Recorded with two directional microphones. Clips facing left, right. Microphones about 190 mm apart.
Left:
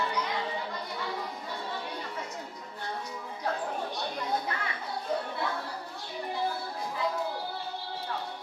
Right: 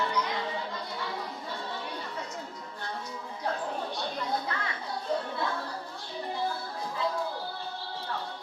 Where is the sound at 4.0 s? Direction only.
15° left (ahead or behind).